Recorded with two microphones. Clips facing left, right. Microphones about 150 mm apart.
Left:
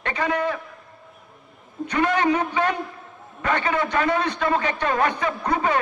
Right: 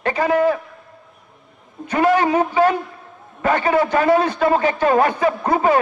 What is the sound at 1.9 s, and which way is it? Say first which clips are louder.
A man's voice: right 5 dB; 40° right (ahead or behind).